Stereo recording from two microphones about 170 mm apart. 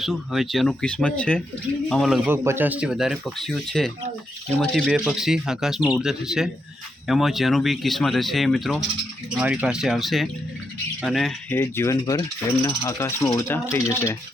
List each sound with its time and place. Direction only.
0.0 s speech: centre (ahead or behind)
2.3 s speech: 15° right (ahead or behind); by 11.5 s centre (ahead or behind)
11.5 s speech: 15° left (ahead or behind)